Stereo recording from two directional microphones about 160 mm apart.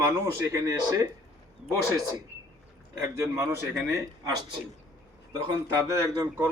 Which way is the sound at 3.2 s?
15° right (ahead or behind).